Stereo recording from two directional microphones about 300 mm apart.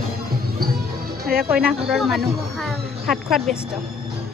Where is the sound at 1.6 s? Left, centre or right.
Centre.